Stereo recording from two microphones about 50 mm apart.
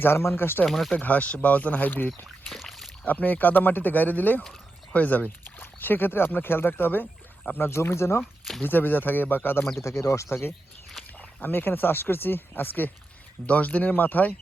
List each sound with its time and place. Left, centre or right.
0.0 s speech: left
0.6 s speech: centre
0.9 s speech: left
2.5 s rowboat: centre
3.1 s speech: left
5.5 s speech: left
7.7 s speech: left
8.6 s speech: left
9.8 s speech: left
11.2 s speech: left
13.5 s speech: left